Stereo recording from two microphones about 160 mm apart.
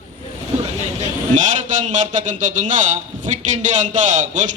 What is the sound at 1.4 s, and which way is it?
A man's voice, 50° right (ahead or behind).